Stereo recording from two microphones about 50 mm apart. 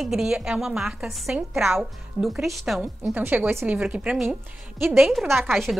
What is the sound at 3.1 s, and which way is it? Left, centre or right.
Speech, right.